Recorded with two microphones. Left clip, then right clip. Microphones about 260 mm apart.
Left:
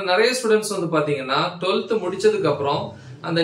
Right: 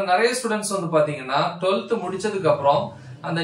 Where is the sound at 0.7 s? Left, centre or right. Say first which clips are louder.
Right 1 dB; centre.